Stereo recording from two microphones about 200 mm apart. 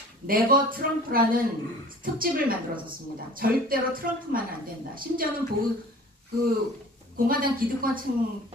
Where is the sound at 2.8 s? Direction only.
45° right (ahead or behind).